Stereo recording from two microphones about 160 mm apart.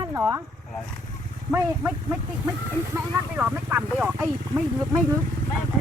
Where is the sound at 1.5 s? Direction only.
15° right (ahead or behind).